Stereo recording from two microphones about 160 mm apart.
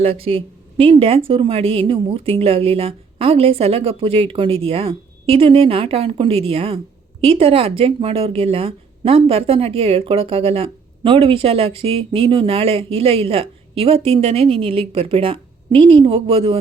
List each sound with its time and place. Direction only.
0.0 s speech: 35° right (ahead or behind)